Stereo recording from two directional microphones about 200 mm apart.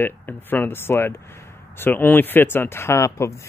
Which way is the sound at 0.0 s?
10° left (ahead or behind).